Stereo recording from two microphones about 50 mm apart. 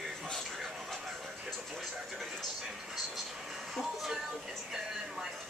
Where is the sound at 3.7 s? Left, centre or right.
Centre.